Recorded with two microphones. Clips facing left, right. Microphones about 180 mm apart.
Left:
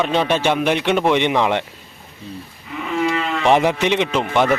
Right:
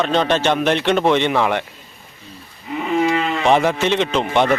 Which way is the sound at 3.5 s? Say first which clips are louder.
Left 1 dB; 15° left (ahead or behind).